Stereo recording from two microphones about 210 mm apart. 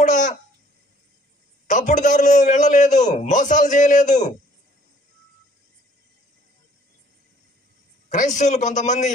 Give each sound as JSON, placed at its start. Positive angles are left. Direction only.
{"t": 0.0, "sound": "a sound", "side_deg": 35}
{"t": 1.7, "sound": "a man's voice", "side_deg": 35}
{"t": 8.1, "sound": "a man's voice", "side_deg": 35}